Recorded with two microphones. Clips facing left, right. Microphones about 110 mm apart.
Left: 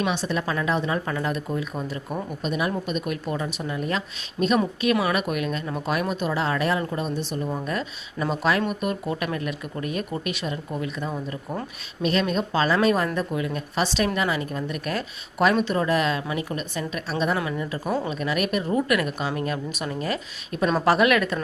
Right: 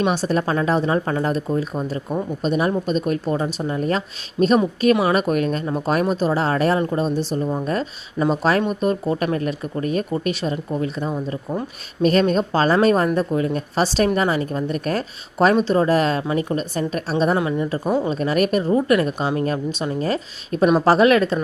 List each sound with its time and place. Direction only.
0.0 s speech: 40° right (ahead or behind)
11.1 s speech: 20° right (ahead or behind)
12.3 s speech: 40° right (ahead or behind)
17.3 s speech: 25° right (ahead or behind)